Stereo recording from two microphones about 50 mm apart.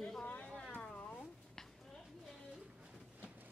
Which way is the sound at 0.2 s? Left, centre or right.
Left.